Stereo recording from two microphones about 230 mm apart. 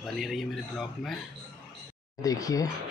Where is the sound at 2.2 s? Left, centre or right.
Centre.